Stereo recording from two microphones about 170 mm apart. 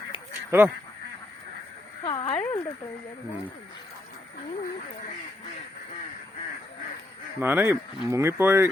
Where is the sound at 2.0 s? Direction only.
30° left (ahead or behind).